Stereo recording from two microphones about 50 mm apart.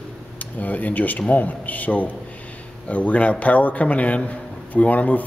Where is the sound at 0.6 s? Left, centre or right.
Left.